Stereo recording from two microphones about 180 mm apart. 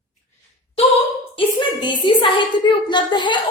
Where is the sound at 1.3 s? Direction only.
25° left (ahead or behind).